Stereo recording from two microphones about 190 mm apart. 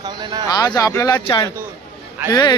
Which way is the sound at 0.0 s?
20° right (ahead or behind).